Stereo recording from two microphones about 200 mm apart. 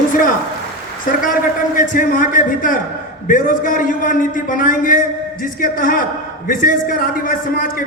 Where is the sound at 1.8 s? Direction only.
40° left (ahead or behind).